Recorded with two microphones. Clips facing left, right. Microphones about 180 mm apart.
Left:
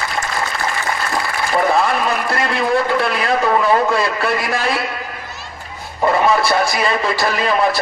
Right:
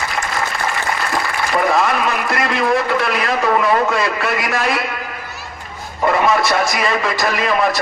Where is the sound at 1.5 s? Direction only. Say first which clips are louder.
Even; 35° left (ahead or behind).